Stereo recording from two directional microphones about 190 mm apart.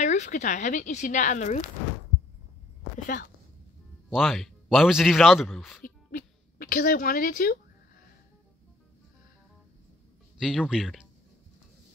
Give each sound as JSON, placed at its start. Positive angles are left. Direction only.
{"t": 0.0, "sound": "speech", "side_deg": 40}
{"t": 4.1, "sound": "speech", "side_deg": 0}
{"t": 5.9, "sound": "music", "side_deg": 45}
{"t": 10.4, "sound": "speech", "side_deg": 0}